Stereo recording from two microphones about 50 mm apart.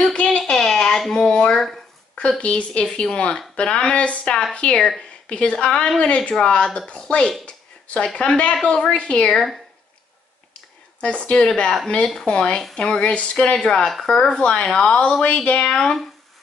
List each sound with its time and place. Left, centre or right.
0.0 s a sound: centre
1.1 s speech: centre
4.7 s speech: centre
5.3 s speech: left
11.0 s speech: left